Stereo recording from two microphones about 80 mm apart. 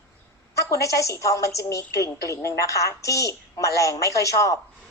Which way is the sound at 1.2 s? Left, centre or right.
Left.